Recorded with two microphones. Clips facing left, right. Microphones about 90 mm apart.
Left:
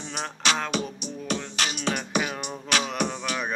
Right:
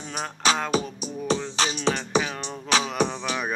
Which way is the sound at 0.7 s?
35° right (ahead or behind).